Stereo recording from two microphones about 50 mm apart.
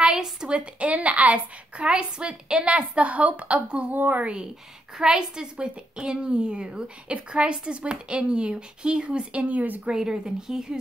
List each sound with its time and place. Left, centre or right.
0.0 s a woman's voice: centre
0.7 s a woman's voice: right
1.8 s a woman's voice: centre
3.9 s speech: right
4.2 s a woman's voice: right
9.8 s speech: centre